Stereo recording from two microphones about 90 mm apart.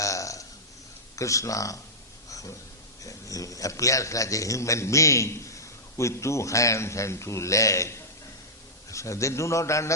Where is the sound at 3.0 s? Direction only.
40° left (ahead or behind).